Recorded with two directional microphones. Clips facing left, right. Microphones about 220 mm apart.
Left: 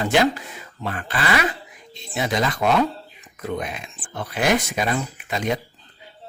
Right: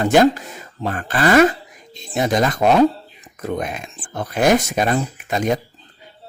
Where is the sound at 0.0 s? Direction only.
45° right (ahead or behind).